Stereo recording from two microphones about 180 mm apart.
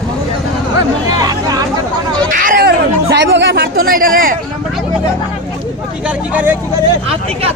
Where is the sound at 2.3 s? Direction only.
50° right (ahead or behind).